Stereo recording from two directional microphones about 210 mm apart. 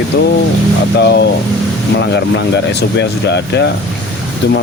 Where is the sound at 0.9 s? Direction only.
55° left (ahead or behind).